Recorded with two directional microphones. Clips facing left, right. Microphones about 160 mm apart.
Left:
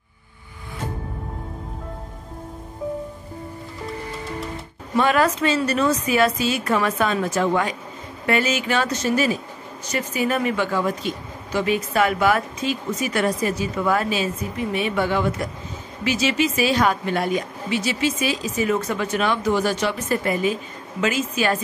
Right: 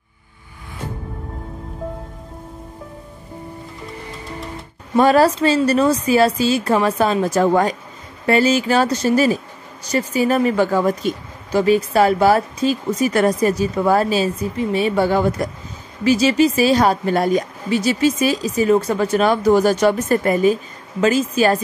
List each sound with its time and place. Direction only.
4.9 s speech: 35° right (ahead or behind)